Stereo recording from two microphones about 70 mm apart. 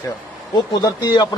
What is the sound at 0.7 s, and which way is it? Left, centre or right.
Speech, left.